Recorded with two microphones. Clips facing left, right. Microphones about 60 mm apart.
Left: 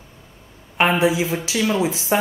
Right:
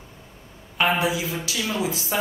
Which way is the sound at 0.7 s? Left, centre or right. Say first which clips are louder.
Left 4 dB; left.